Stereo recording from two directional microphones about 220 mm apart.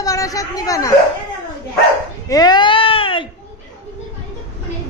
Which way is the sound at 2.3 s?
20° left (ahead or behind).